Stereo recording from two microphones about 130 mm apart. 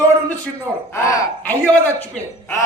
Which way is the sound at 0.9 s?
15° left (ahead or behind).